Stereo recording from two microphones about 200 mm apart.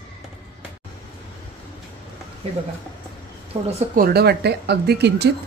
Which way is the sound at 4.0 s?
50° right (ahead or behind).